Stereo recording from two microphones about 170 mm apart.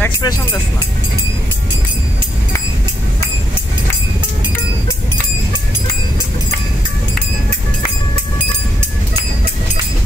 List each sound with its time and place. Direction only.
0.2 s speech: 20° left (ahead or behind)